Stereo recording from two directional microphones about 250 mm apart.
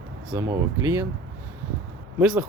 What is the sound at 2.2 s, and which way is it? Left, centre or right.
Speech, centre.